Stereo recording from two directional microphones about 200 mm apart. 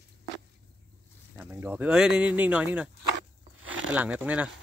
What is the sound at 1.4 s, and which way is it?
Speech, 10° right (ahead or behind).